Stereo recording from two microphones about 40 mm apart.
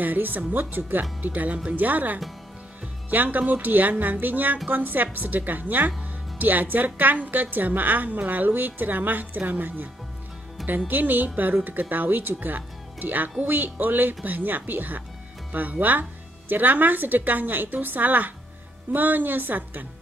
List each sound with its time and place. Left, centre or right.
0.0 s speech: right
10.9 s speech: right